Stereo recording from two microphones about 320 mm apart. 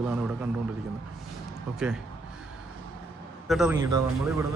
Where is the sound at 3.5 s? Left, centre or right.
Centre.